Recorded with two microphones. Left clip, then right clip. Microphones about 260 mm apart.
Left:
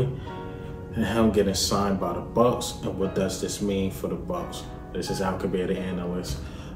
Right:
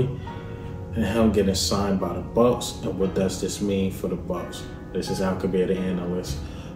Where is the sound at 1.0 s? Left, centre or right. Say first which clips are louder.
Right 1 dB; centre.